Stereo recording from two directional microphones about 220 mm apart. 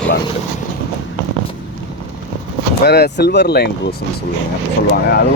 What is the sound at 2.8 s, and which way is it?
Speech, 45° left (ahead or behind).